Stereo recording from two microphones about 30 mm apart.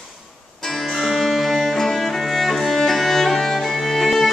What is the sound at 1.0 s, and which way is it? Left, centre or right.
Music, centre.